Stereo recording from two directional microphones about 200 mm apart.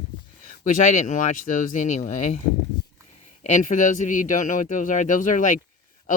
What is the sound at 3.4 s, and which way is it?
Speech, 40° left (ahead or behind).